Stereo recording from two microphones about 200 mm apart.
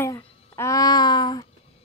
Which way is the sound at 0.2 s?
30° left (ahead or behind).